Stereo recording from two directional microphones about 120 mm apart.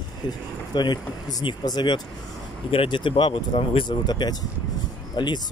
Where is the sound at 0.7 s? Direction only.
35° left (ahead or behind).